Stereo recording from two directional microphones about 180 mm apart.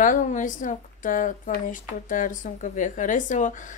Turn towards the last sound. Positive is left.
turn(degrees=45)  # may be behind; listen again after turning